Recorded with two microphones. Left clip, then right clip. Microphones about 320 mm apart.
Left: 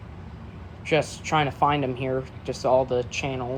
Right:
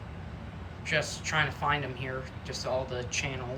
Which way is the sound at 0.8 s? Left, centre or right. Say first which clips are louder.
Left 6 dB; centre.